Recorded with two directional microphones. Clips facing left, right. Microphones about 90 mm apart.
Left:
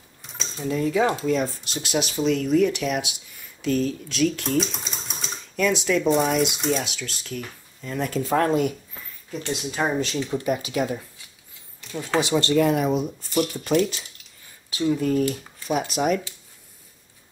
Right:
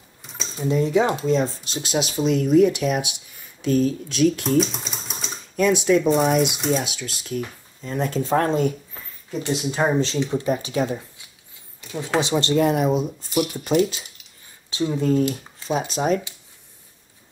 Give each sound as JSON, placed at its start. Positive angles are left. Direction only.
{"t": 0.2, "sound": "a sound", "side_deg": 0}
{"t": 0.7, "sound": "speech", "side_deg": -25}
{"t": 4.4, "sound": "speech", "side_deg": 0}
{"t": 5.6, "sound": "speech", "side_deg": -25}
{"t": 6.0, "sound": "speech", "side_deg": 0}
{"t": 7.2, "sound": "speech", "side_deg": -25}
{"t": 9.7, "sound": "speech", "side_deg": -30}
{"t": 11.9, "sound": "speech", "side_deg": -20}
{"t": 13.3, "sound": "speech", "side_deg": -5}
{"t": 13.7, "sound": "speech", "side_deg": -20}